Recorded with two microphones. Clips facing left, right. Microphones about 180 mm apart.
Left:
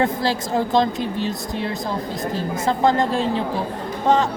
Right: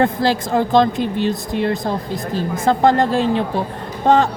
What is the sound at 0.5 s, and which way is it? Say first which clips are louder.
Speech: right 4 dB; 60° right (ahead or behind).